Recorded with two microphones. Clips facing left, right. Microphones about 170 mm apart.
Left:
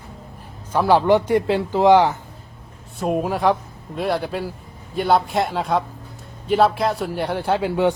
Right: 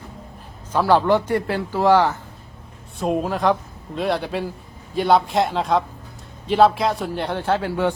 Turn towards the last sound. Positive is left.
turn(degrees=15)  # may be behind; listen again after turning